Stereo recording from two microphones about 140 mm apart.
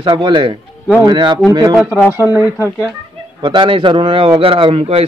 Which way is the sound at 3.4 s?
35° right (ahead or behind).